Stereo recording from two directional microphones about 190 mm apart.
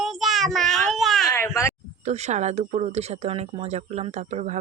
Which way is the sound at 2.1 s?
35° right (ahead or behind).